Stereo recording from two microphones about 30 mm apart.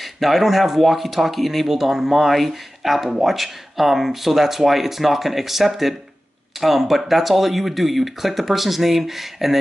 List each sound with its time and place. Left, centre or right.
0.0 s speech: centre
1.9 s speech: centre